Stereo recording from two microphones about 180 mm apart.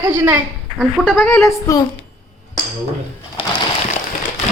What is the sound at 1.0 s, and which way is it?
Speech, 10° left (ahead or behind).